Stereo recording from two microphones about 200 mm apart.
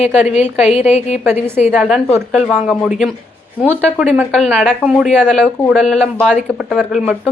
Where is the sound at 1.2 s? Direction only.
10° right (ahead or behind).